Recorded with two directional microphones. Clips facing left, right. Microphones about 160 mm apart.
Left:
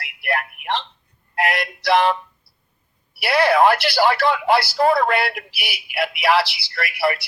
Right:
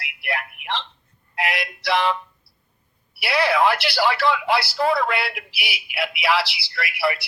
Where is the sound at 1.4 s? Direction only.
45° left (ahead or behind).